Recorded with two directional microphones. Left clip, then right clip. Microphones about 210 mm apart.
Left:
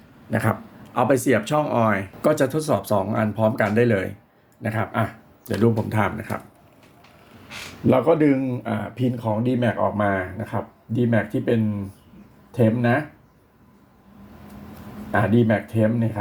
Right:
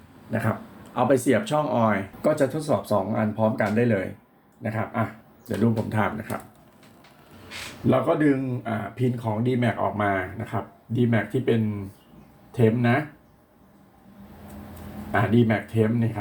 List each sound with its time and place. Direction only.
0.3 s speech: 40° left (ahead or behind)
0.9 s speech: 25° left (ahead or behind)
7.9 s speech: 45° left (ahead or behind)
12.5 s speech: 40° left (ahead or behind)
15.1 s speech: 40° left (ahead or behind)